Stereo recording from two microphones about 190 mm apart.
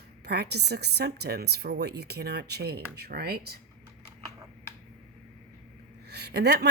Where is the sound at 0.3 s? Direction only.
60° right (ahead or behind).